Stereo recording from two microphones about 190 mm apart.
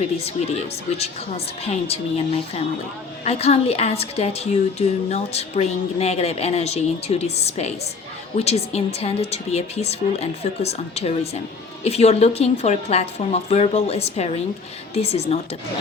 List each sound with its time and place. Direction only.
0.3 s a woman's voice: 35° left (ahead or behind)